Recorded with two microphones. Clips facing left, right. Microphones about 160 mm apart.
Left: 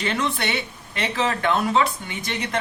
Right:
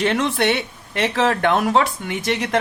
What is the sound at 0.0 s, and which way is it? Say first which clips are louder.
Speech: right 6 dB; 65° right (ahead or behind).